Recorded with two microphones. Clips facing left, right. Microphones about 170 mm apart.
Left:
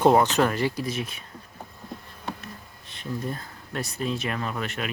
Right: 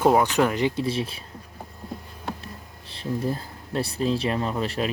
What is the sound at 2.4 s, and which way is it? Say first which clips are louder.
Speech: right 1 dB; 30° right (ahead or behind).